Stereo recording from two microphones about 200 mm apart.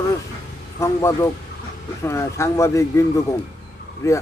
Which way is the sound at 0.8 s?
15° left (ahead or behind).